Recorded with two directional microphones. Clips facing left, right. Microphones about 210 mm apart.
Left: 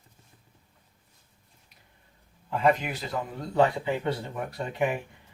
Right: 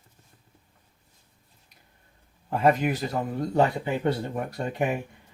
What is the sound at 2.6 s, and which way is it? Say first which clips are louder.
Speech: right 3 dB; 45° right (ahead or behind).